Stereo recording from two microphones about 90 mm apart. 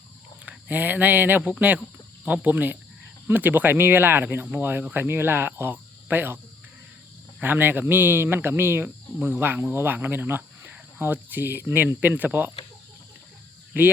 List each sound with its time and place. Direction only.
0.4 s speech: 20° right (ahead or behind)
7.4 s speech: 20° right (ahead or behind)